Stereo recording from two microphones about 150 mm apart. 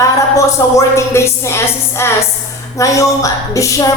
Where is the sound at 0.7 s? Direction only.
20° left (ahead or behind).